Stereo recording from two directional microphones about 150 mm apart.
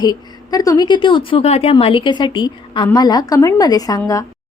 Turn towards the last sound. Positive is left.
turn(degrees=25)  # may be behind; listen again after turning